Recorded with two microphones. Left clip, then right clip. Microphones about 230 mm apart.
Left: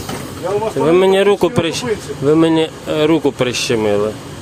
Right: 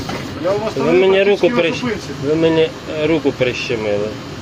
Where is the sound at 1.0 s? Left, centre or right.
Left.